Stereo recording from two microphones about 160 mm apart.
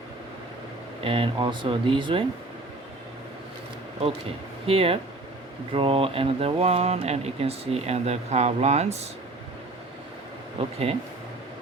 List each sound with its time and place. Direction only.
1.0 s speech: 35° right (ahead or behind)
4.6 s speech: 35° right (ahead or behind)
10.6 s speech: 40° right (ahead or behind)